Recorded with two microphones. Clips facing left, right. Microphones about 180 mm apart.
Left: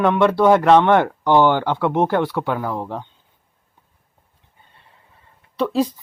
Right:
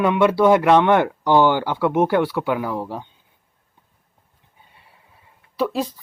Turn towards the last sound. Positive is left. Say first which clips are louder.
# left 3 dB
turn(degrees=-5)  # may be behind; listen again after turning